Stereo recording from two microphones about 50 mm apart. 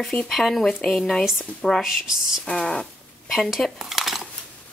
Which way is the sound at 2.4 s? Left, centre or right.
Centre.